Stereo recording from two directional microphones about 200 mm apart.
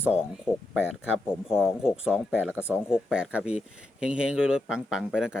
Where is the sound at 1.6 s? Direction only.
5° right (ahead or behind).